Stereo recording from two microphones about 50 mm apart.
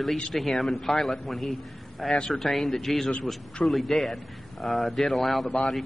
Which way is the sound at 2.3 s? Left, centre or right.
Centre.